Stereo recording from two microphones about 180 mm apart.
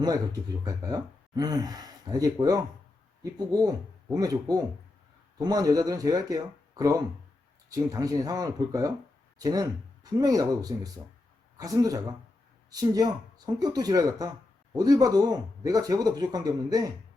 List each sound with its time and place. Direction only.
0.6 s speech: 20° right (ahead or behind)